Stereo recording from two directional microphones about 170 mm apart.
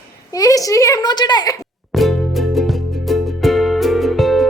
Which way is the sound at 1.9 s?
Centre (ahead or behind).